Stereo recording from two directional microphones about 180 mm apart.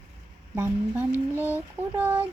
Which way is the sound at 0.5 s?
10° right (ahead or behind).